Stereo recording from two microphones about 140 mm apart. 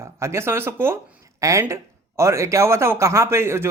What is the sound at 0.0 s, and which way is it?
Speech, 20° right (ahead or behind).